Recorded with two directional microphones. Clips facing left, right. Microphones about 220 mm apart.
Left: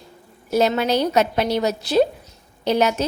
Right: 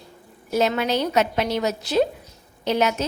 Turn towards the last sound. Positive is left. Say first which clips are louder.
# left 3 dB
turn(degrees=35)  # may be behind; listen again after turning